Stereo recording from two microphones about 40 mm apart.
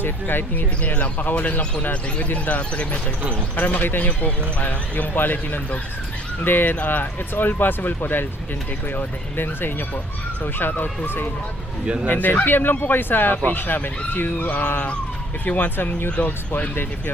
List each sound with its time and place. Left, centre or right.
0.0 s speech: left
0.9 s speech: left
3.5 s speech: left
6.7 s speech: left
12.0 s speech: left
12.3 s speech: left
15.4 s speech: left
16.2 s speech: left